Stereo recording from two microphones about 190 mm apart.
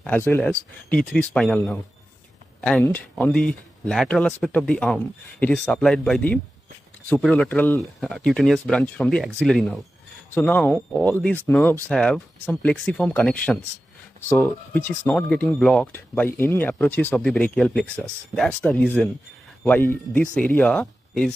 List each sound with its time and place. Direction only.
0.0 s speech: 10° left (ahead or behind)